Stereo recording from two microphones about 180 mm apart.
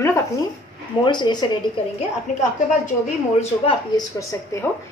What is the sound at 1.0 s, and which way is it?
Speech, 25° left (ahead or behind).